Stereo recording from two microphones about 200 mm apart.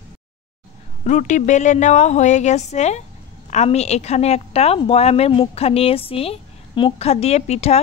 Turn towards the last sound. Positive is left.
turn(degrees=30)  # may be behind; listen again after turning